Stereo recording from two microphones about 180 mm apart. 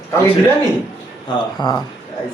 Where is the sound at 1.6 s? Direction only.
25° left (ahead or behind).